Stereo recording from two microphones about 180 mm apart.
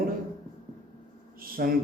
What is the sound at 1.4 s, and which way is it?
Speech, 55° right (ahead or behind).